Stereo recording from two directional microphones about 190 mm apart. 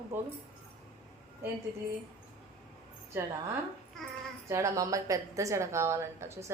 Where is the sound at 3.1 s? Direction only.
15° right (ahead or behind).